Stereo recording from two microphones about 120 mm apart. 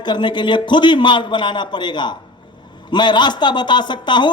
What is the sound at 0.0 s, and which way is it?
A man's voice, 40° left (ahead or behind).